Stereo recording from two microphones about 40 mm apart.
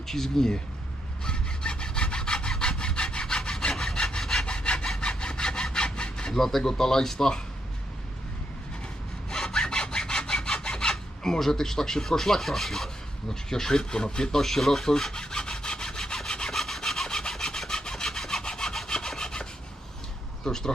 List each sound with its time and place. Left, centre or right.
0.1 s speech: centre
1.2 s sawing: centre
4.4 s sawing: left
9.3 s sawing: centre
13.3 s speech: centre
14.4 s sawing: centre
20.4 s a sound: centre